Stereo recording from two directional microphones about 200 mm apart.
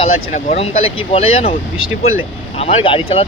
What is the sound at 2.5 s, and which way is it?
Speech, 30° left (ahead or behind).